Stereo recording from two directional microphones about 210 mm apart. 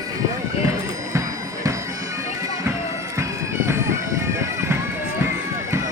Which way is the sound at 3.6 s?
10° right (ahead or behind).